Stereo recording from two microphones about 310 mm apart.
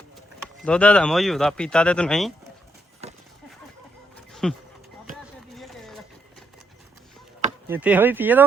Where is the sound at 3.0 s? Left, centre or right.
Centre.